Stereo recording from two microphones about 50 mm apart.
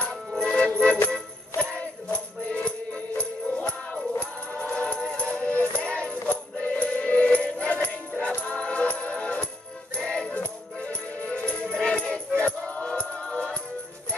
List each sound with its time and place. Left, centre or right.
0.4 s music: left
4.7 s music: left